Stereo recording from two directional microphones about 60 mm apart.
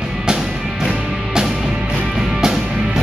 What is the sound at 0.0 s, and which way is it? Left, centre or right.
Music, centre.